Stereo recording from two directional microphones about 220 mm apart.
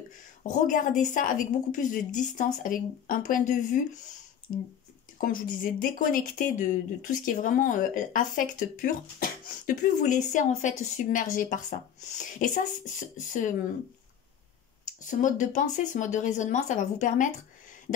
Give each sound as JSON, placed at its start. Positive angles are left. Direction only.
{"t": 0.4, "sound": "speech", "side_deg": 35}
{"t": 15.0, "sound": "speech", "side_deg": 35}